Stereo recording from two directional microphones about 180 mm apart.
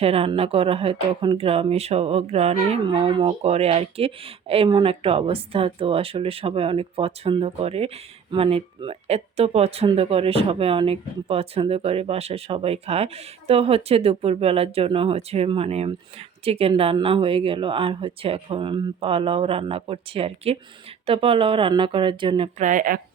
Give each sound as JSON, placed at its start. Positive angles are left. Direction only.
{"t": 0.0, "sound": "speech", "side_deg": -35}
{"t": 22.5, "sound": "speech", "side_deg": -45}